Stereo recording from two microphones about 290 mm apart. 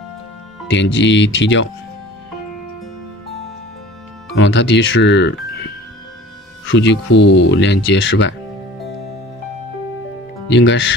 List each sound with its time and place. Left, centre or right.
0.9 s speech: left
4.4 s speech: left
6.6 s speech: left
10.5 s speech: left